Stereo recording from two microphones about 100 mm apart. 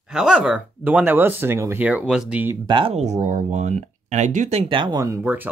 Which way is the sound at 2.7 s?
65° right (ahead or behind).